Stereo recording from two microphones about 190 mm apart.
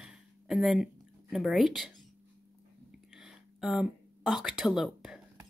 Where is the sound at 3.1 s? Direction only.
Centre (ahead or behind).